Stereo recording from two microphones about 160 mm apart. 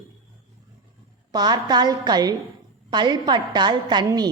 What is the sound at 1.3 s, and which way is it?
A woman's voice, 25° right (ahead or behind).